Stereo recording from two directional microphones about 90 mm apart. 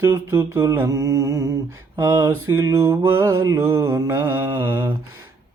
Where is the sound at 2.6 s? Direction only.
30° right (ahead or behind).